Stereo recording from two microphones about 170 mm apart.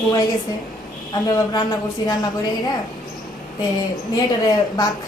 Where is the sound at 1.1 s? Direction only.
25° left (ahead or behind).